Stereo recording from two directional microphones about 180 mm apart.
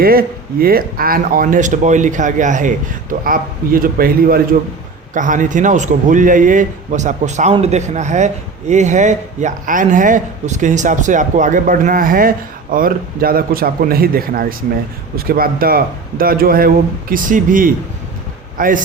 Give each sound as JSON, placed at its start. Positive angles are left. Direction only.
{"t": 0.0, "sound": "a man's voice", "side_deg": -55}